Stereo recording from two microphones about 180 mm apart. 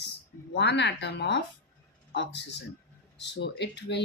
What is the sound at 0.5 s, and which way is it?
Speech, 70° left (ahead or behind).